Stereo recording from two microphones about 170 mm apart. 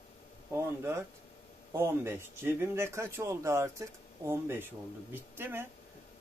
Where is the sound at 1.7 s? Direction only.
15° right (ahead or behind).